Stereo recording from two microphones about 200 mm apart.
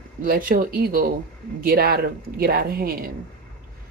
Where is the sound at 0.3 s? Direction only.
45° right (ahead or behind).